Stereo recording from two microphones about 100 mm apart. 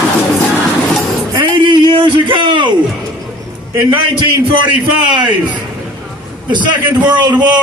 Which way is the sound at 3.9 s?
55° right (ahead or behind).